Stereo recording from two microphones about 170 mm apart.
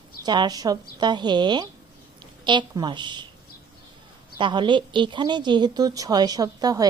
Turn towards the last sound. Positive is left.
turn(degrees=-20)  # may be behind; listen again after turning